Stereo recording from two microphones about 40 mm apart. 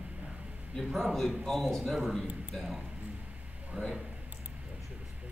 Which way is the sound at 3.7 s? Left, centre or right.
Right.